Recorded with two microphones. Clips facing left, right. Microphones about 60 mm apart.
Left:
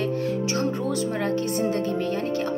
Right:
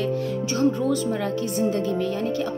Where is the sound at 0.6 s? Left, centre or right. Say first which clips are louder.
Right 4 dB; left.